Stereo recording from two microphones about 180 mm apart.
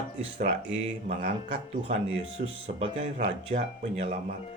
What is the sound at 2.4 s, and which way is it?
Speech, 35° right (ahead or behind).